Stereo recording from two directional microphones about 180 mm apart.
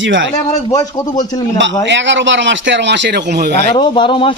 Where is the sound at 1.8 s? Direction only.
85° right; by 3.6 s 65° right (ahead or behind).